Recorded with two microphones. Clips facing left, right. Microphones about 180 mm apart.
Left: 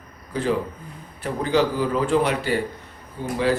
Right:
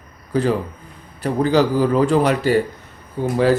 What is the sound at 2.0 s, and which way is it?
A man's voice, 40° right (ahead or behind).